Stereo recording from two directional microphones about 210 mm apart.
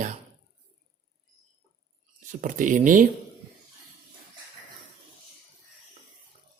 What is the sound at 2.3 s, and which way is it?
Speech, 35° right (ahead or behind).